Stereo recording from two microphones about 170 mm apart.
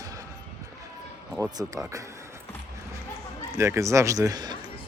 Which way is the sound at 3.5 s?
15° right (ahead or behind).